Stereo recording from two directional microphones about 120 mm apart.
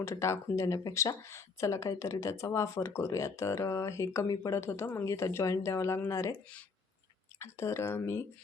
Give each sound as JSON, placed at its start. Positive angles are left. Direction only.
{"t": 0.0, "sound": "speech", "side_deg": 25}
{"t": 7.3, "sound": "speech", "side_deg": 20}